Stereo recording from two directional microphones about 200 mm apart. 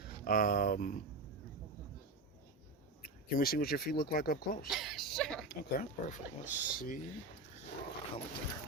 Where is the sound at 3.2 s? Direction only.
45° left (ahead or behind).